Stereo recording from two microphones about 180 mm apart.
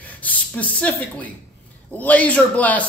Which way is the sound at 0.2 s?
10° left (ahead or behind).